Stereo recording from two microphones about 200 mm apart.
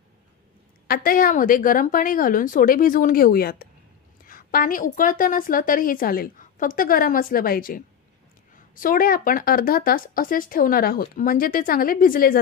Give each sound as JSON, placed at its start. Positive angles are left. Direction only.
{"t": 0.8, "sound": "speech", "side_deg": 45}